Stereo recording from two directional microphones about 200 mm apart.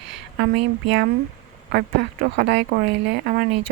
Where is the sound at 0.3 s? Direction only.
55° right (ahead or behind).